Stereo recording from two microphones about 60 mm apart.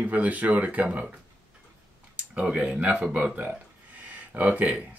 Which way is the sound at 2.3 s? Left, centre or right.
Centre.